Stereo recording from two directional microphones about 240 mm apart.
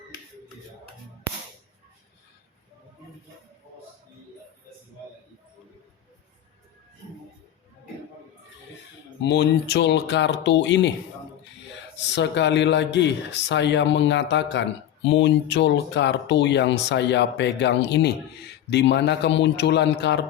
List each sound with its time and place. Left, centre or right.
9.2 s speech: left
11.9 s speech: left